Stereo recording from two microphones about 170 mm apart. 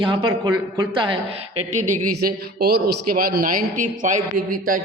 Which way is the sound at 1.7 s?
50° right (ahead or behind).